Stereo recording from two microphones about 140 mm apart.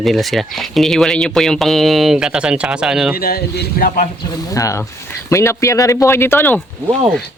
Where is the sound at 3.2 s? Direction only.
90° left.